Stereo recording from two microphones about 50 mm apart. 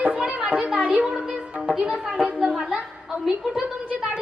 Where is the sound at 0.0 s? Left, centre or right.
Right.